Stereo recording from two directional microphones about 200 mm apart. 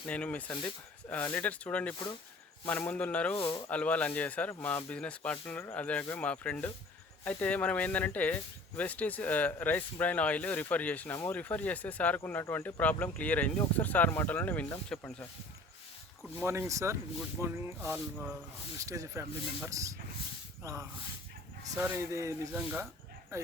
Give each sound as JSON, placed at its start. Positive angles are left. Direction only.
{"t": 0.1, "sound": "speech", "side_deg": 5}
{"t": 3.3, "sound": "speech", "side_deg": 25}
{"t": 3.7, "sound": "speech", "side_deg": 5}
{"t": 16.4, "sound": "speech", "side_deg": -15}